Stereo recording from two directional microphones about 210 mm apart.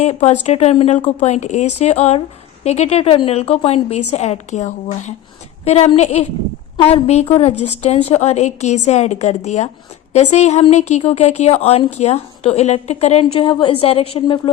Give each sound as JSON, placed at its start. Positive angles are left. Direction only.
{"t": 0.0, "sound": "a woman's voice", "side_deg": 30}